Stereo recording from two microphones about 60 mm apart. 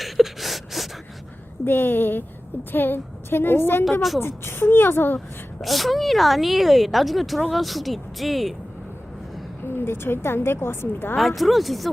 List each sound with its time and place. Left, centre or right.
0.0 s a sound: centre
1.6 s a woman's voice: left
5.6 s speech: centre
9.6 s a woman's voice: left
11.2 s speech: centre